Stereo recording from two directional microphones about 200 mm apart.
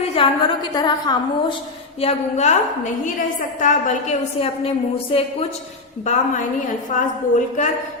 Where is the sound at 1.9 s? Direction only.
30° left (ahead or behind).